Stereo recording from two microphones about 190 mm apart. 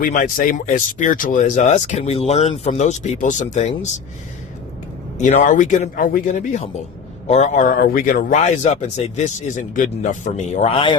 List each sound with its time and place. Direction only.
0.0 s speech: 45° left (ahead or behind)
5.1 s speech: 35° left (ahead or behind)